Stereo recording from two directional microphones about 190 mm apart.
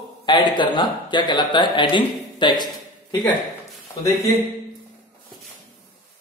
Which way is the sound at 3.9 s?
15° left (ahead or behind).